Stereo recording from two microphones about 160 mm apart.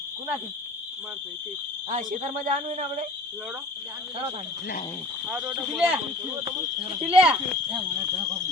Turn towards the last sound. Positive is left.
turn(degrees=-10)  # may be behind; listen again after turning